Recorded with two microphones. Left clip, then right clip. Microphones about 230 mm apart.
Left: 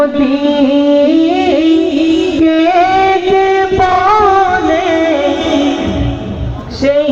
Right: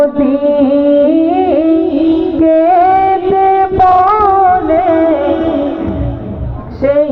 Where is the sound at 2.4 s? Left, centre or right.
Left.